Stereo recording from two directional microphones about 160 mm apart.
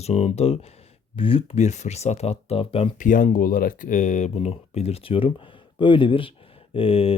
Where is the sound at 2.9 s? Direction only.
55° left (ahead or behind).